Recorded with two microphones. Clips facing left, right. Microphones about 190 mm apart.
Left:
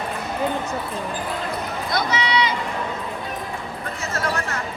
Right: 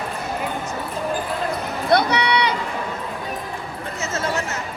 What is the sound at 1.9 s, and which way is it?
Run, 60° right (ahead or behind).